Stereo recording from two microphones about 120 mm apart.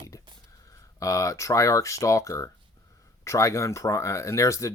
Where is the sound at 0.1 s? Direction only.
25° left (ahead or behind).